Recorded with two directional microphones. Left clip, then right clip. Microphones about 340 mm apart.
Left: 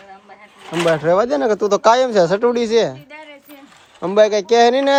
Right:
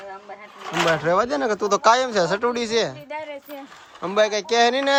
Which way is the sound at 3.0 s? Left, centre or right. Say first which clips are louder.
Right 5 dB; right.